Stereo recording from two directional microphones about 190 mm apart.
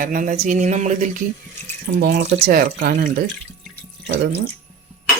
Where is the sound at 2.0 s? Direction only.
60° right (ahead or behind).